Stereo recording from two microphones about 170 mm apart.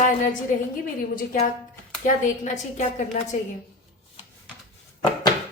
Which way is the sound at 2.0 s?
45° left (ahead or behind).